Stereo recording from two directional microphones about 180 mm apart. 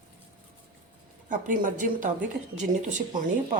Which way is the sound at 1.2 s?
50° right (ahead or behind).